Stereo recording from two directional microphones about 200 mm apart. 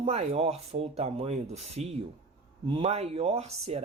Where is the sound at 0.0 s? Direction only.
30° right (ahead or behind).